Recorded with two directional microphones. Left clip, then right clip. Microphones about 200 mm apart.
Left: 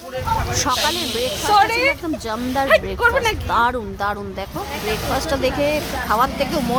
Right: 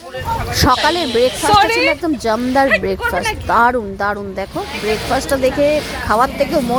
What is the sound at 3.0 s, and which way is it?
Speech, 65° left (ahead or behind).